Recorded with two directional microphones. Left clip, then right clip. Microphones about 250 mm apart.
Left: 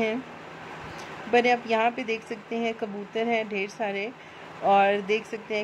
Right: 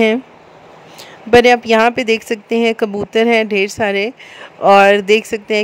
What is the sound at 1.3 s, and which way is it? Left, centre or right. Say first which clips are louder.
Speech: right 13 dB; right.